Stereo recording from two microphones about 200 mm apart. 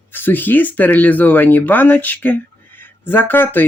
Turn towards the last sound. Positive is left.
turn(degrees=10)  # may be behind; listen again after turning